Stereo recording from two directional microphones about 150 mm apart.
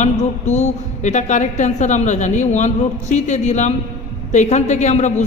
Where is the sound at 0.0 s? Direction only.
50° left (ahead or behind).